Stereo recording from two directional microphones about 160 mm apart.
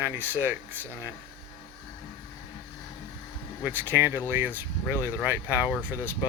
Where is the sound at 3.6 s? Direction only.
10° right (ahead or behind).